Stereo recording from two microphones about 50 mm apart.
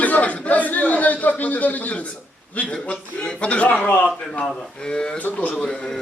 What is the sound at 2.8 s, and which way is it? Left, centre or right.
A man's voice, left.